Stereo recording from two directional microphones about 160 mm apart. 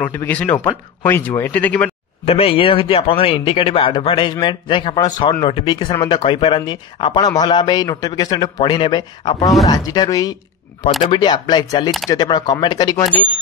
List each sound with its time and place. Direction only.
0.0 s speech: 15° left (ahead or behind)
2.2 s a man's voice: 40° left (ahead or behind)